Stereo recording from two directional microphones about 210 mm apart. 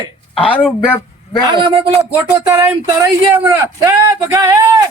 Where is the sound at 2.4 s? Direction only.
15° right (ahead or behind).